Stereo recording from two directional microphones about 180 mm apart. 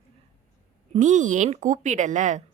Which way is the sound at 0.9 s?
45° right (ahead or behind).